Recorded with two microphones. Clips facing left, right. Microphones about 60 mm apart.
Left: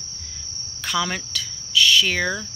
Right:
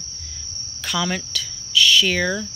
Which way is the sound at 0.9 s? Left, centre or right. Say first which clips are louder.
Even; left.